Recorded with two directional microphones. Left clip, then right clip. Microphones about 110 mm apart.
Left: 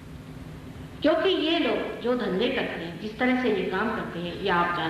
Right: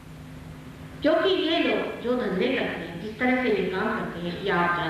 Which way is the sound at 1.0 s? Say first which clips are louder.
Right 1 dB; 35° left (ahead or behind).